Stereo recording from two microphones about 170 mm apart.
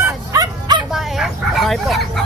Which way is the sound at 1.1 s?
Centre (ahead or behind).